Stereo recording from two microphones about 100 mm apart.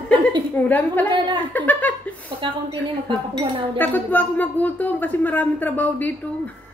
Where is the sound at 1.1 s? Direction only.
55° right (ahead or behind).